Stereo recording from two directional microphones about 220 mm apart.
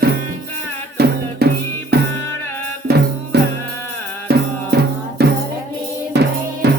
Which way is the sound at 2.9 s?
45° right (ahead or behind).